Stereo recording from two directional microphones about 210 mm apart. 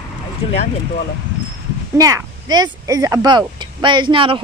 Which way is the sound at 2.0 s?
15° right (ahead or behind).